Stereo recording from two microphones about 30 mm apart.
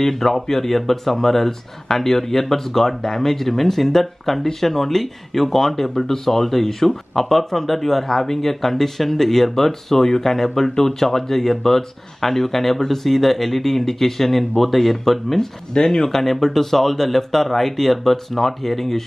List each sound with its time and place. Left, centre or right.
0.0 s speech: centre
15.7 s speech: left
16.1 s speech: centre